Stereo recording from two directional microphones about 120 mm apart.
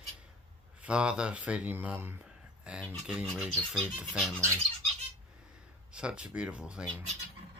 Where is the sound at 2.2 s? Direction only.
5° right (ahead or behind).